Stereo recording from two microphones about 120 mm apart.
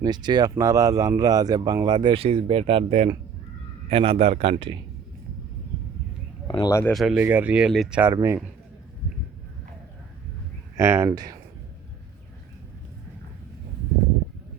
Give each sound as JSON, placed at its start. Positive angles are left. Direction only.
{"t": 0.0, "sound": "a man's voice", "side_deg": -35}
{"t": 6.7, "sound": "speech", "side_deg": 25}
{"t": 6.9, "sound": "speech", "side_deg": 0}
{"t": 7.2, "sound": "speech", "side_deg": -15}
{"t": 8.0, "sound": "speech", "side_deg": -25}
{"t": 10.8, "sound": "speech", "side_deg": -20}